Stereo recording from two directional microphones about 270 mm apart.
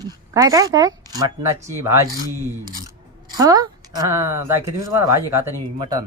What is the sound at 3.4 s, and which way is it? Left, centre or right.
A woman's voice, centre.